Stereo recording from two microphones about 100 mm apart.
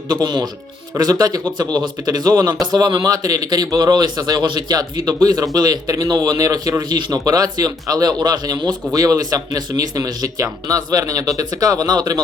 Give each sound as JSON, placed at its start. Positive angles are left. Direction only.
{"t": 0.1, "sound": "a man's voice", "side_deg": -45}